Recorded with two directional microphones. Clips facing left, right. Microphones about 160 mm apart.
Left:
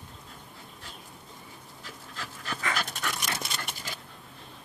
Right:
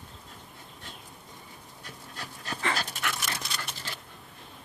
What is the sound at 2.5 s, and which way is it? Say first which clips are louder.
Dog: right 1 dB; 35° right (ahead or behind).